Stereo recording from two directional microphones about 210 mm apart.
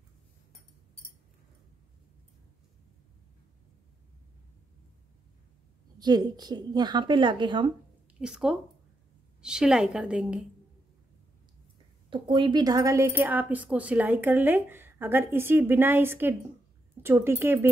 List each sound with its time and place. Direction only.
5.9 s a woman's voice: 20° right (ahead or behind)
8.2 s a woman's voice: 5° right (ahead or behind)
12.1 s a woman's voice: 25° right (ahead or behind)